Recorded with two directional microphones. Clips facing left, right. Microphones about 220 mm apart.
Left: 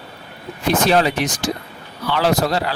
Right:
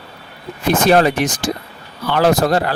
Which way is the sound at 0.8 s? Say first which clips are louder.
Right 5 dB; 50° right (ahead or behind).